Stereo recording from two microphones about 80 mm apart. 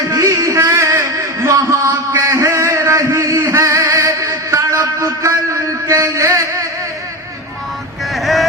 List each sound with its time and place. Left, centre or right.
0.1 s music: right
2.1 s a sound: right
5.9 s music: right
8.1 s vehicle: centre